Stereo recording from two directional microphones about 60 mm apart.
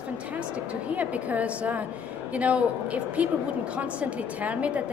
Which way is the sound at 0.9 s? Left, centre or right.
Right.